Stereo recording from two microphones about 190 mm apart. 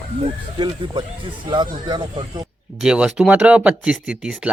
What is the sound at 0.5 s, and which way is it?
Speech, 25° right (ahead or behind).